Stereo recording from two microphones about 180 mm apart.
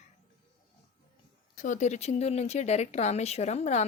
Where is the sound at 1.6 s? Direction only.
40° left (ahead or behind).